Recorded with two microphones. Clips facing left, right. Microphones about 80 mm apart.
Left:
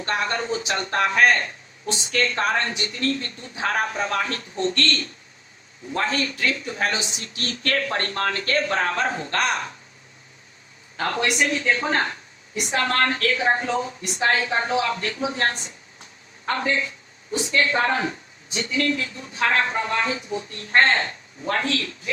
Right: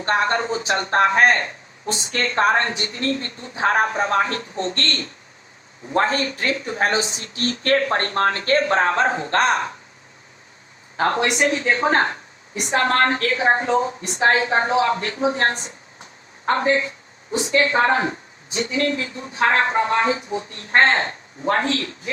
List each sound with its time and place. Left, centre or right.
0.0 s a man's voice: right
10.9 s a man's voice: right